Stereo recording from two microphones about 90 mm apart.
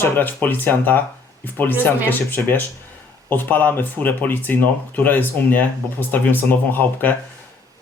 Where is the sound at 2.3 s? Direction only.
20° left (ahead or behind).